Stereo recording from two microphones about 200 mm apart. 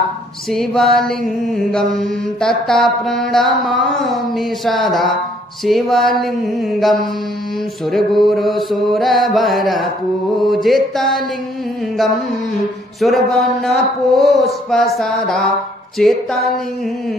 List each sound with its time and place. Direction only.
0.5 s mantra: centre (ahead or behind)
13.0 s mantra: centre (ahead or behind)